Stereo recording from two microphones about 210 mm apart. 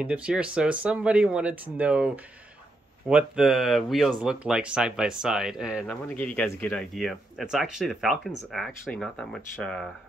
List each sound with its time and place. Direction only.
0.0 s speech: 5° right (ahead or behind)
3.1 s speech: 5° right (ahead or behind)
6.0 s speech: 5° left (ahead or behind)